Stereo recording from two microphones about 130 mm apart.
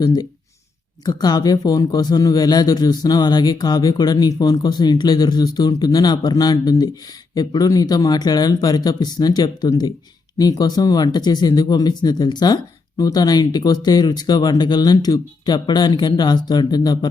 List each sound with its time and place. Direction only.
0.0 s speech: 30° left (ahead or behind)